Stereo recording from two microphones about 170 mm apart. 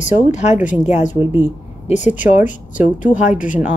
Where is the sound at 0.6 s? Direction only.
10° right (ahead or behind).